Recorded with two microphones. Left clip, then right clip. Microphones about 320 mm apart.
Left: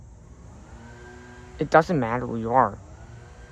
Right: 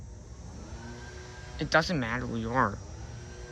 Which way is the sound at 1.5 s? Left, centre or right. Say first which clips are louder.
Left 7 dB; centre.